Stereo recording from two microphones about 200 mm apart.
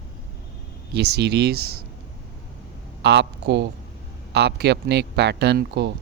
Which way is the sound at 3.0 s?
60° right (ahead or behind).